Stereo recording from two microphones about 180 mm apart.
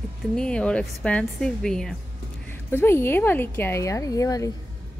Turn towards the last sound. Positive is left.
turn(degrees=20)  # may be behind; listen again after turning